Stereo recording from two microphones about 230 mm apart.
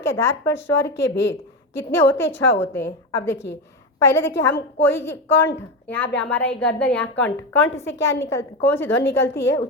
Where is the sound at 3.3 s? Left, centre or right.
Left.